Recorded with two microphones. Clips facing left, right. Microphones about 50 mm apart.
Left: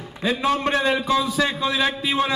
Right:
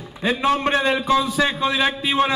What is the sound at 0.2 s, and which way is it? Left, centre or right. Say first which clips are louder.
A man's voice: right 2 dB; right.